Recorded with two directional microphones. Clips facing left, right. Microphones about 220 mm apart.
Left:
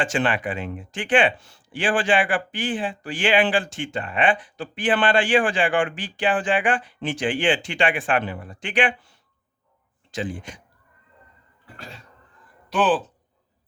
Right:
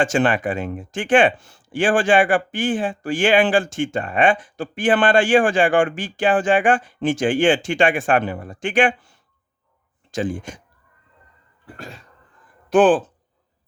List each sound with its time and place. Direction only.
0.0 s speech: 45° right (ahead or behind)
12.7 s speech: 50° right (ahead or behind)